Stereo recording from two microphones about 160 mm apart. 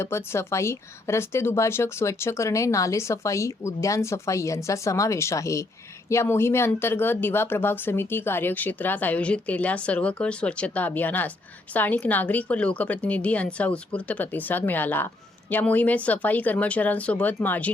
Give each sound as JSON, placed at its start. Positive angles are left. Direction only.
{"t": 0.0, "sound": "a woman's voice", "side_deg": 15}